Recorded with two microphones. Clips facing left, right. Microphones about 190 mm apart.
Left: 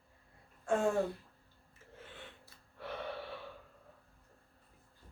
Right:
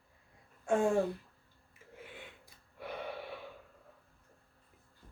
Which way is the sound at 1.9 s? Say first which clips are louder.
Right 2 dB; 10° right (ahead or behind).